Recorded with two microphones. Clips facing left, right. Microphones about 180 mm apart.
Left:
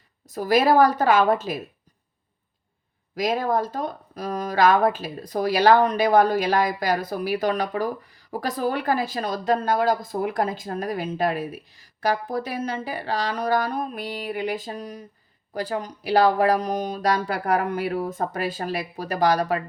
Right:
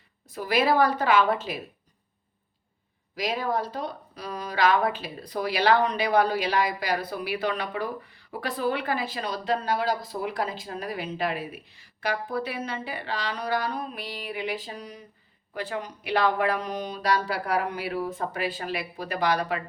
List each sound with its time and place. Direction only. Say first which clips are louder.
0.3 s speech: left 5 dB; 40° left (ahead or behind)
3.2 s speech: left 5 dB; 45° left (ahead or behind)